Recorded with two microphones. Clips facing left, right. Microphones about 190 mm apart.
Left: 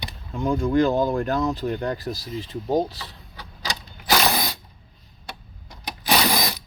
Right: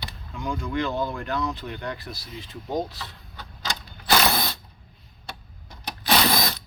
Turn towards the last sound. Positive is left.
turn(degrees=15)  # may be behind; listen again after turning